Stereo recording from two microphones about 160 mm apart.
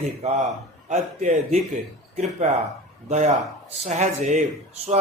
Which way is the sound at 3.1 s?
50° right (ahead or behind).